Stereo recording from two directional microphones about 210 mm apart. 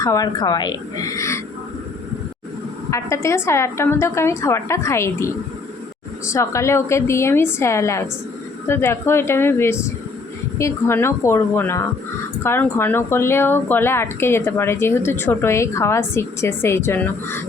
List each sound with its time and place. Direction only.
0.0 s speech: 15° left (ahead or behind)
2.9 s speech: 15° left (ahead or behind)